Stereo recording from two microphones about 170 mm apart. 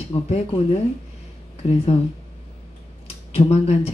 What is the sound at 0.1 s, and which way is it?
Speech, 35° left (ahead or behind).